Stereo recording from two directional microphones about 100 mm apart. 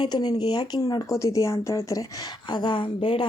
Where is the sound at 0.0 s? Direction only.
45° left (ahead or behind).